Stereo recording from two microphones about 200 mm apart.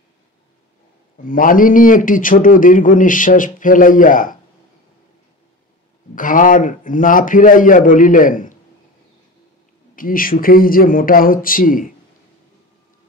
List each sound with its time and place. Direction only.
1.1 s a man's voice: 45° left (ahead or behind)
6.1 s a man's voice: 40° left (ahead or behind)
9.9 s a man's voice: 45° left (ahead or behind)